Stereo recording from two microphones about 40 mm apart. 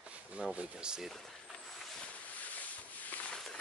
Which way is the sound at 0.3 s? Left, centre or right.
Right.